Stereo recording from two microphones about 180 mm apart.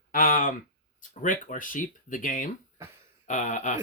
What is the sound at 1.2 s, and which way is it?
Speech, 45° left (ahead or behind).